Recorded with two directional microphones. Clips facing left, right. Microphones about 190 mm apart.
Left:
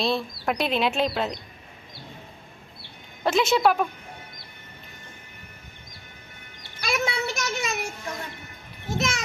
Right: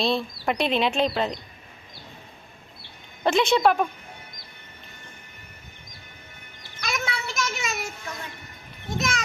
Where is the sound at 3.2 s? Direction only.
Centre (ahead or behind).